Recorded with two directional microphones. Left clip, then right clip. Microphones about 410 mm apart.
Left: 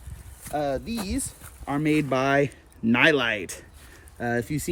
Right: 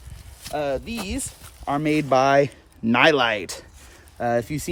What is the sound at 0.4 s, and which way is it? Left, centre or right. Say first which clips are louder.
Speech: right 2 dB; centre.